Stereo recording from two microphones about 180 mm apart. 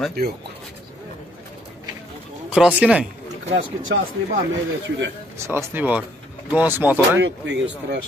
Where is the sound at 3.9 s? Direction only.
85° right.